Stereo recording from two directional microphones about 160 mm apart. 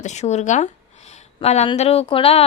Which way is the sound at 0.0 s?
45° left (ahead or behind).